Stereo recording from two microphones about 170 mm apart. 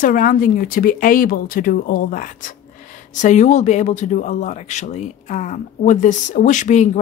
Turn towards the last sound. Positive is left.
turn(degrees=45)  # may be behind; listen again after turning